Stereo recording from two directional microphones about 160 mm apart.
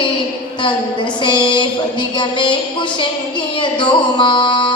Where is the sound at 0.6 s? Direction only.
30° left (ahead or behind).